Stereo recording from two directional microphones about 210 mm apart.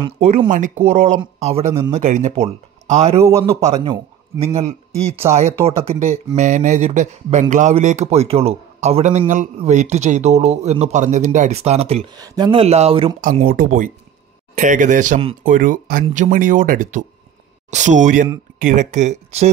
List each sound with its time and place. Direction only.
0.0 s speech: 25° right (ahead or behind)
3.2 s a man's voice: 15° right (ahead or behind)
5.2 s a man's voice: 15° right (ahead or behind)
5.9 s speech: 30° right (ahead or behind)
13.2 s speech: 40° right (ahead or behind)